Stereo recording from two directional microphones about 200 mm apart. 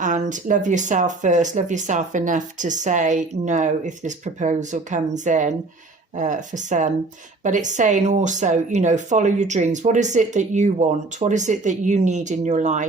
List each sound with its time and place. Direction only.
0.0 s speech: 40° right (ahead or behind)